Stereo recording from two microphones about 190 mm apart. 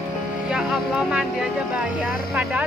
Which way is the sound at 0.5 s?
5° right (ahead or behind).